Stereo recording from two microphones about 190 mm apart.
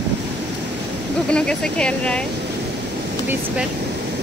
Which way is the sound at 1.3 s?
5° left (ahead or behind).